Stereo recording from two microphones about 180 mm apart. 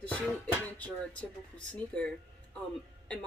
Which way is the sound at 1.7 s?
5° left (ahead or behind).